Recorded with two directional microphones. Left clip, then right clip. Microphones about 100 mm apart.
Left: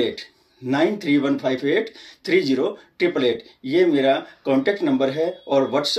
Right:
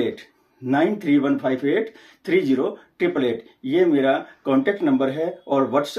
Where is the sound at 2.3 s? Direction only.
45° right (ahead or behind).